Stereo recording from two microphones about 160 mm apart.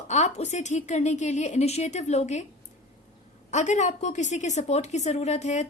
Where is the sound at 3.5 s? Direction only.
45° left (ahead or behind).